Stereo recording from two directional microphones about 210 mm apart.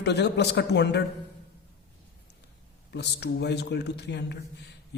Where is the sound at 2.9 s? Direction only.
55° left (ahead or behind).